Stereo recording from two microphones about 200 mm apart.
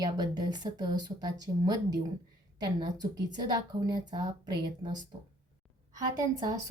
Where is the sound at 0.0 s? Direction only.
20° right (ahead or behind).